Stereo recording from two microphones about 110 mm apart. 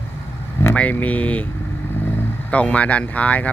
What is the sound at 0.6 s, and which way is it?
Speech, 15° left (ahead or behind).